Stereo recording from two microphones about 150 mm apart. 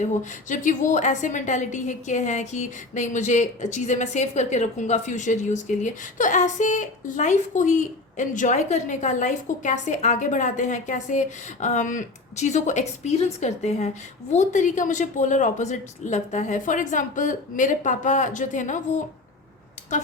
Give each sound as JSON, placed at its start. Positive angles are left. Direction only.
{"t": 0.0, "sound": "a woman's voice", "side_deg": 55}